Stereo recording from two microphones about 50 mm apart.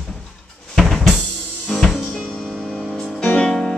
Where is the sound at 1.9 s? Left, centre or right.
Centre.